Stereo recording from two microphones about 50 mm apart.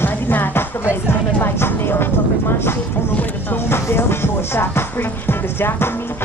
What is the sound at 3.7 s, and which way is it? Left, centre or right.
Music, left.